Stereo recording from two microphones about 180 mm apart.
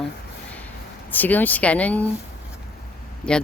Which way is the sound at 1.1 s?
10° left (ahead or behind).